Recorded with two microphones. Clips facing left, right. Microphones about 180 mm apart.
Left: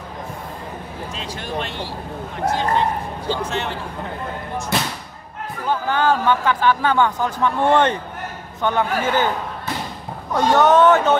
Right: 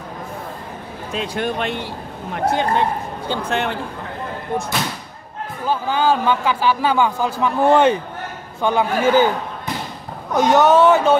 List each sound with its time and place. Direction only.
1.1 s speech: 55° right (ahead or behind)
5.7 s speech: 10° right (ahead or behind)
10.3 s speech: 5° right (ahead or behind)